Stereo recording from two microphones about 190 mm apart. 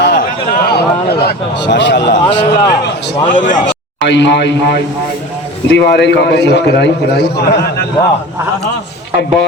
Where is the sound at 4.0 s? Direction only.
65° left (ahead or behind).